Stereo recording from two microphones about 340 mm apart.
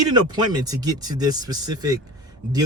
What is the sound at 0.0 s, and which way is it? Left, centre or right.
Speech, centre.